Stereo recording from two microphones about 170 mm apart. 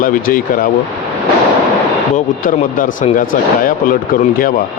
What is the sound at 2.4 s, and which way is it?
Speech, 50° left (ahead or behind).